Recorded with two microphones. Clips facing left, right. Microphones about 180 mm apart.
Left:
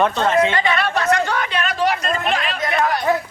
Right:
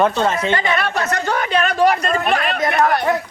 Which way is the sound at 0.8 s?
45° right (ahead or behind).